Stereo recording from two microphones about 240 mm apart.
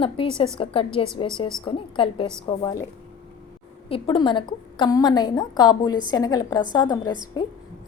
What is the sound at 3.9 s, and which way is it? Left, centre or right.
A woman's voice, centre.